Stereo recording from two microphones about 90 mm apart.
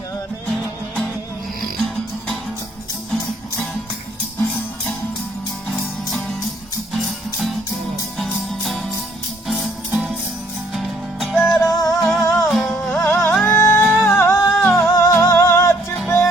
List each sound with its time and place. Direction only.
0.5 s music: 5° left (ahead or behind)
6.9 s music: centre (ahead or behind)
10.7 s music: centre (ahead or behind)
11.5 s music: 40° left (ahead or behind)
12.5 s music: 5° left (ahead or behind)
12.9 s music: 25° left (ahead or behind)